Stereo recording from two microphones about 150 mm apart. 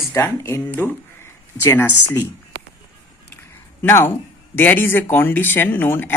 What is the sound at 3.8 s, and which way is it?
Speech, 15° left (ahead or behind).